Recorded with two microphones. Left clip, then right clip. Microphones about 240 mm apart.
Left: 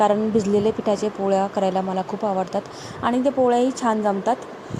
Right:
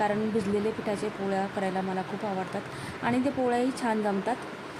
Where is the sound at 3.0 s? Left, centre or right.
Centre.